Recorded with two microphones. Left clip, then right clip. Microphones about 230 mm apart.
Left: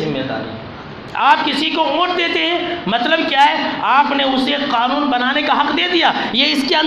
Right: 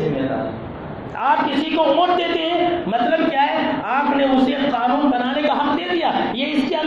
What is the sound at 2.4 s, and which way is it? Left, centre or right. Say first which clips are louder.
A man's voice: left 1 dB; left.